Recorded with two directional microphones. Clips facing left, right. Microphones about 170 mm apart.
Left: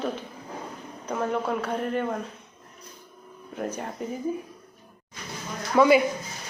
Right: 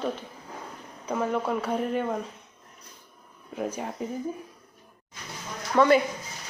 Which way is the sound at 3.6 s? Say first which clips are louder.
Even; centre (ahead or behind).